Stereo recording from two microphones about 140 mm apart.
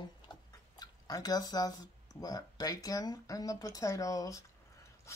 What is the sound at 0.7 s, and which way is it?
Drip, 25° left (ahead or behind).